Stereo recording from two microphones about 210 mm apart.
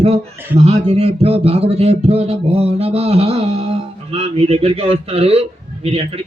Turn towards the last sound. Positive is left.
turn(degrees=-30)  # may be behind; listen again after turning